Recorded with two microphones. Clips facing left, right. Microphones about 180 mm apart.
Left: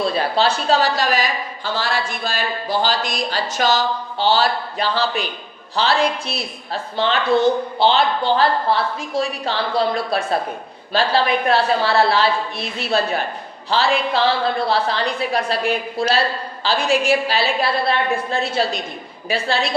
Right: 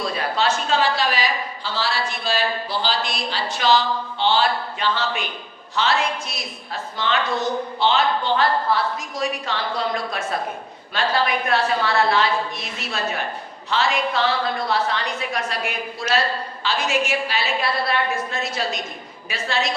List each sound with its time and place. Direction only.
0.0 s a woman's voice: 30° left (ahead or behind)